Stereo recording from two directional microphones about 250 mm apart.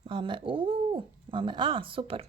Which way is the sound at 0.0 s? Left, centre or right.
Centre.